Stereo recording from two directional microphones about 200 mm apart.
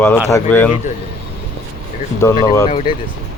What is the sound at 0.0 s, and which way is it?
Speech, 15° left (ahead or behind).